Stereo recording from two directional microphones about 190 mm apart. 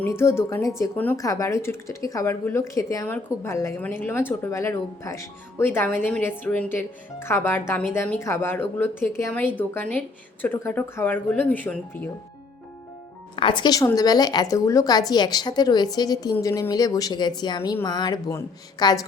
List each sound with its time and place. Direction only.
0.0 s speech: 15° left (ahead or behind)
13.3 s a woman's voice: 25° left (ahead or behind)